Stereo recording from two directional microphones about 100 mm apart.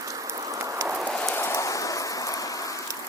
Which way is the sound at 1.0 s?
10° left (ahead or behind).